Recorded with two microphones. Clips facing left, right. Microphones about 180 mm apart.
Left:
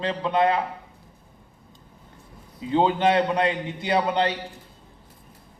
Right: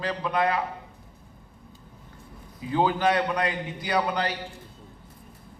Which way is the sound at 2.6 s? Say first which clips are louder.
Left 3 dB; 25° left (ahead or behind).